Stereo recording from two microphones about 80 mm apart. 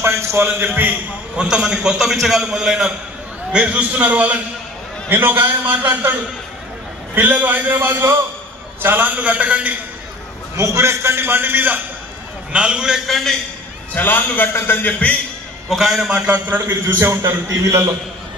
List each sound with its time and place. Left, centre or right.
0.0 s a man's voice: right
7.2 s a man's voice: right
10.5 s a man's voice: right
12.5 s a man's voice: centre
13.0 s a man's voice: centre
13.9 s a man's voice: left
15.7 s a man's voice: centre; by 16.7 s right
16.8 s a man's voice: right